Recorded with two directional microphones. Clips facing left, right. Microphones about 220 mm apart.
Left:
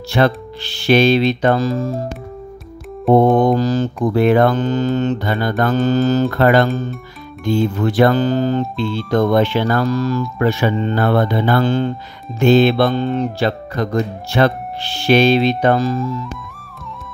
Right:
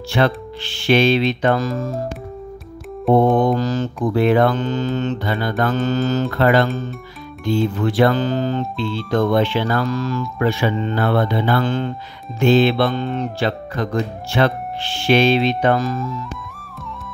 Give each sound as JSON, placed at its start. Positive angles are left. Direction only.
{"t": 0.1, "sound": "speech", "side_deg": 40}
{"t": 3.3, "sound": "speech", "side_deg": 40}
{"t": 6.3, "sound": "speech", "side_deg": 45}
{"t": 12.4, "sound": "speech", "side_deg": 45}